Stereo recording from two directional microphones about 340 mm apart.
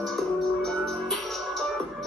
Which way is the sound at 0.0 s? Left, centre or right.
Centre.